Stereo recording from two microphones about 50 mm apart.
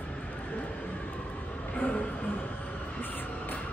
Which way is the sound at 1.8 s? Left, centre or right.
Left.